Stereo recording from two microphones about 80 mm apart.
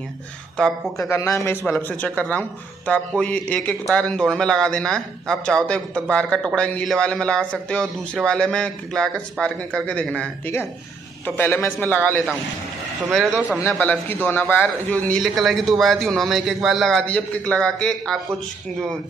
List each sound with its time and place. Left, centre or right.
0.6 s a man's voice: centre
0.9 s speech: left
1.7 s a man's voice: left
11.2 s a man's voice: left
13.7 s a man's voice: left
15.2 s a man's voice: centre
17.0 s a man's voice: centre